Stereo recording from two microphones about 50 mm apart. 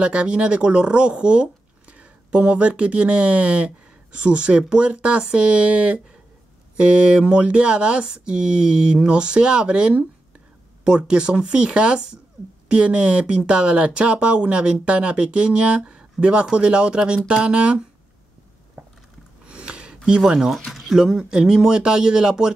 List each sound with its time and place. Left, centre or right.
0.0 s speech: right
19.4 s a sound: right
20.1 s speech: centre